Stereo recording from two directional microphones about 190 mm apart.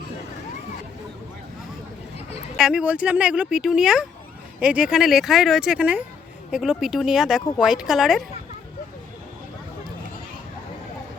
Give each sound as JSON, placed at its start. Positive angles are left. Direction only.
{"t": 2.6, "sound": "speech", "side_deg": -5}